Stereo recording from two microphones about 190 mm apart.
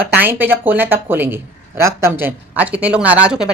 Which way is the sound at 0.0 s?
10° right (ahead or behind).